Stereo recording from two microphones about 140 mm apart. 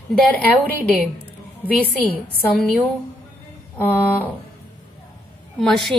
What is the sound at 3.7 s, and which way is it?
Speech, 15° left (ahead or behind).